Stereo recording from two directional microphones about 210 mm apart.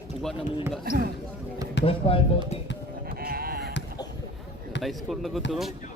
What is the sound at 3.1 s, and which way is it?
Sheep, 45° right (ahead or behind).